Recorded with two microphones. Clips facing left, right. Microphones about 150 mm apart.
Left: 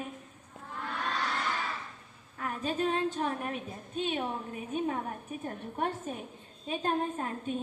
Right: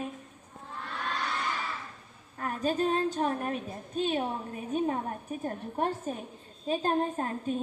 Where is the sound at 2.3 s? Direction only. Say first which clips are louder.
Right 3 dB; 40° right (ahead or behind).